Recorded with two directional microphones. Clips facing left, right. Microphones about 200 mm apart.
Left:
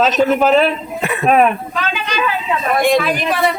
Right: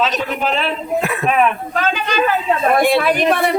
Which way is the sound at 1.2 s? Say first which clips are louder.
Left 5 dB; 40° left (ahead or behind).